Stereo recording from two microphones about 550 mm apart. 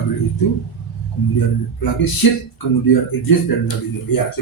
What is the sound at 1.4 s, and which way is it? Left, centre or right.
Speech, left.